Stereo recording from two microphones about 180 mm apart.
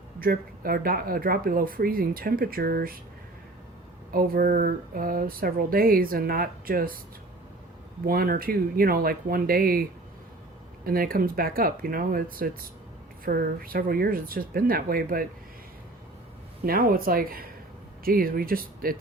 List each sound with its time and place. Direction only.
0.2 s speech: 55° right (ahead or behind)
4.1 s speech: 55° right (ahead or behind)
8.0 s speech: 55° right (ahead or behind)
10.8 s speech: 55° right (ahead or behind)
16.6 s speech: 55° right (ahead or behind)